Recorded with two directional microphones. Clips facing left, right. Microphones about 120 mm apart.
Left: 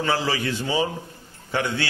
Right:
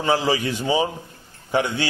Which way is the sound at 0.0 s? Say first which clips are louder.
Right 3 dB; 15° right (ahead or behind).